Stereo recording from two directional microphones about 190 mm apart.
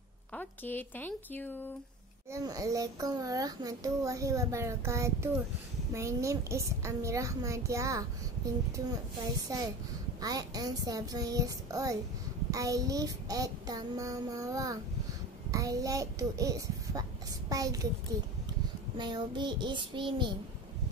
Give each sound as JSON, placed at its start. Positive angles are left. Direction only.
{"t": 0.3, "sound": "speech", "side_deg": 10}
{"t": 2.3, "sound": "a child's voice", "side_deg": -20}
{"t": 9.5, "sound": "a child's voice", "side_deg": -20}
{"t": 10.2, "sound": "child singing", "side_deg": -20}
{"t": 15.5, "sound": "a child's voice", "side_deg": -20}
{"t": 17.5, "sound": "child singing", "side_deg": -20}